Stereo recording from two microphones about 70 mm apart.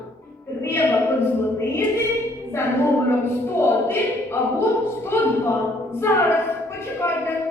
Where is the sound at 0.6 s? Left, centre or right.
Left.